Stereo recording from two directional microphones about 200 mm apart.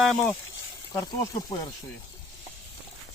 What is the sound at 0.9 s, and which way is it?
Speech, 20° left (ahead or behind).